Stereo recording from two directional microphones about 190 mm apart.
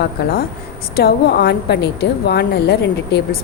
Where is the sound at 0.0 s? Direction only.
55° left (ahead or behind).